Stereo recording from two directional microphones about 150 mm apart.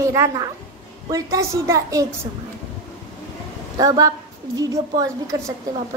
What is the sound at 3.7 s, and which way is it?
A woman's voice, 25° right (ahead or behind).